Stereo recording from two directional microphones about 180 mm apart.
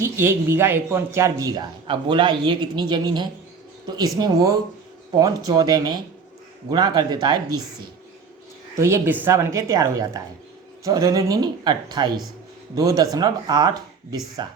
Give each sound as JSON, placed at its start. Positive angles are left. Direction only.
{"t": 0.0, "sound": "speech", "side_deg": -15}
{"t": 1.9, "sound": "speech", "side_deg": -30}
{"t": 8.7, "sound": "speech", "side_deg": -15}